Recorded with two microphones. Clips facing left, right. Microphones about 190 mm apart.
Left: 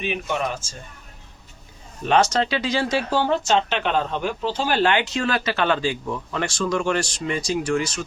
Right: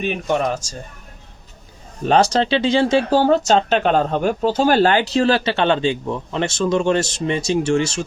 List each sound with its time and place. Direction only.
0.0 s speech: 40° right (ahead or behind)
2.0 s speech: 35° right (ahead or behind)